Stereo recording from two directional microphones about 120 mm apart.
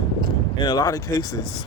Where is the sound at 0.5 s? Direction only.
35° left (ahead or behind).